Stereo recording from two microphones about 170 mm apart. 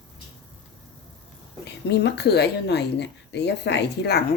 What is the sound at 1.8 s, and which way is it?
Speech, 85° left.